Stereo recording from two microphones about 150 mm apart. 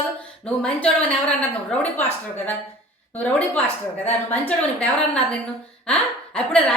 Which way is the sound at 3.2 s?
10° left (ahead or behind).